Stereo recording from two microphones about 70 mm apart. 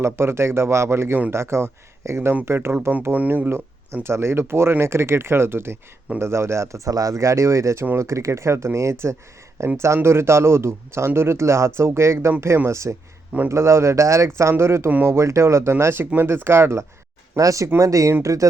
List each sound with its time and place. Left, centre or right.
0.0 s speech: right
3.0 s speech: right
4.0 s speech: right
15.8 s speech: right
17.3 s speech: right